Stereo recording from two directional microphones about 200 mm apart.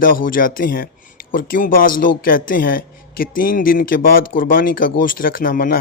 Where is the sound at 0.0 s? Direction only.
45° left (ahead or behind).